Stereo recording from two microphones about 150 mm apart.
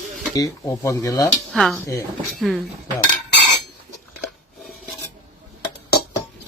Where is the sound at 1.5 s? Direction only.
5° left (ahead or behind).